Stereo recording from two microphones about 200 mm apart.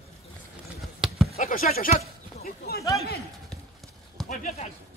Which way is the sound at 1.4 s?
45° left (ahead or behind).